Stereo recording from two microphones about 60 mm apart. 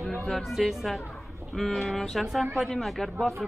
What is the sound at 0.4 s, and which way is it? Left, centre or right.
A woman's voice, centre.